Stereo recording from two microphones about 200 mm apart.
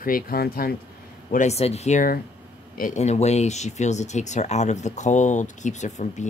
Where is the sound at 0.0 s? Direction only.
45° left (ahead or behind).